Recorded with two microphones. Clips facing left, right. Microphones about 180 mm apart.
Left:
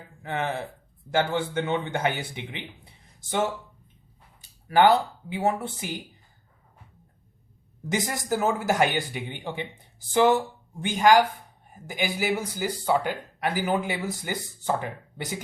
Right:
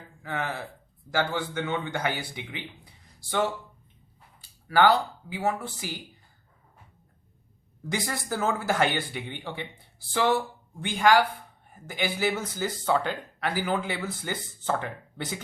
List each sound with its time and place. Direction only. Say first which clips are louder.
0.2 s speech: left 3 dB; 25° left (ahead or behind)
7.9 s speech: left 4 dB; 20° left (ahead or behind)